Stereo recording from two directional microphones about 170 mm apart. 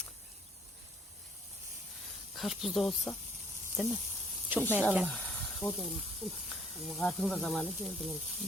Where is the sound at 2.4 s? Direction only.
Centre (ahead or behind).